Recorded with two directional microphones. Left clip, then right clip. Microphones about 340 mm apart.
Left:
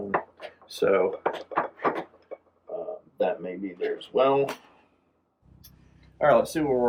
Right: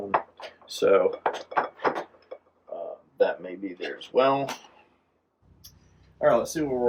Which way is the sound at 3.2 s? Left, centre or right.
Centre.